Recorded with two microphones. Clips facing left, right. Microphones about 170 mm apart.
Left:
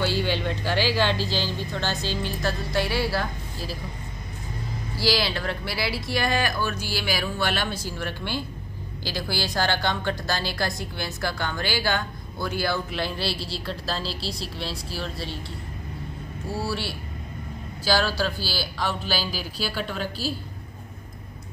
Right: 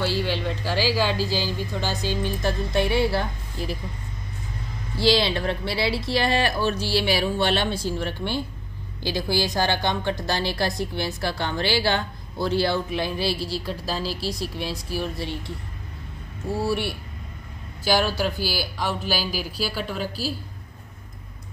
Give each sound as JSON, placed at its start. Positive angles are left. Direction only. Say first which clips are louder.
{"t": 0.0, "sound": "speech", "louder": "even", "side_deg": 0}
{"t": 4.9, "sound": "a woman's voice", "louder": "right 4 dB", "side_deg": -25}